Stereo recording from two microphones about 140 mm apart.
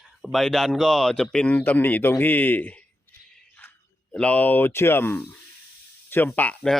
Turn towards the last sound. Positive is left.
turn(degrees=5)  # may be behind; listen again after turning